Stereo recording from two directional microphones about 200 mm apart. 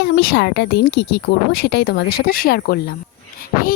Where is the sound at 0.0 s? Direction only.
55° left (ahead or behind).